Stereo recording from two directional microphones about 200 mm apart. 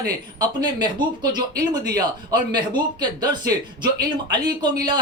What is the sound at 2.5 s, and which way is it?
A man's voice, 20° right (ahead or behind).